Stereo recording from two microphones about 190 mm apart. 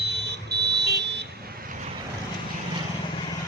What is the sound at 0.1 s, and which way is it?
Vehicle, 60° right (ahead or behind).